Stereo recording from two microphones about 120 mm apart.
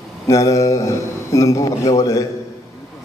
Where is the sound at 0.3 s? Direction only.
25° left (ahead or behind).